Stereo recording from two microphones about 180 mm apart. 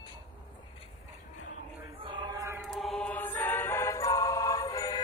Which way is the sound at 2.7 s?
Centre (ahead or behind).